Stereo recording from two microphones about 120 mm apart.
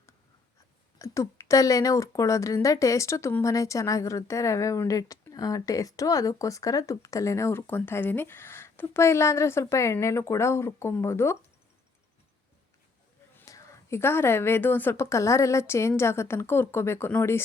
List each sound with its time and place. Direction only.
0.9 s a woman's voice: 25° left (ahead or behind)
13.3 s a woman's voice: 25° left (ahead or behind)